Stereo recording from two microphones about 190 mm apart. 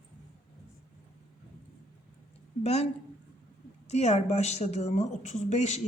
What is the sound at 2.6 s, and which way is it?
A woman's voice, 35° left (ahead or behind).